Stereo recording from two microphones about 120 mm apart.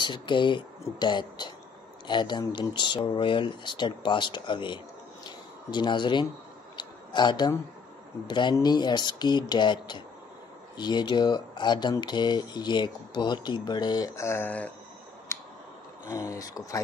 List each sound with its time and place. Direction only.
0.0 s speech: 40° left (ahead or behind)
5.2 s a sound: 40° left (ahead or behind)
8.3 s speech: 40° left (ahead or behind); by 14.5 s 20° left (ahead or behind)
15.3 s tick: 20° left (ahead or behind)
16.1 s speech: 25° left (ahead or behind)